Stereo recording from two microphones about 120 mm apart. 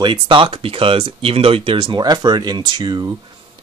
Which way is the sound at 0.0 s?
45° right (ahead or behind).